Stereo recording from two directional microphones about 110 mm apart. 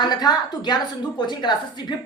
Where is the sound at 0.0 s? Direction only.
40° left (ahead or behind).